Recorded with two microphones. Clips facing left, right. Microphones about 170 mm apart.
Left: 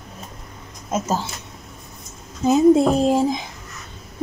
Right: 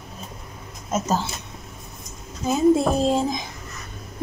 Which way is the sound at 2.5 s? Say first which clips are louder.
Left 4 dB; 15° left (ahead or behind).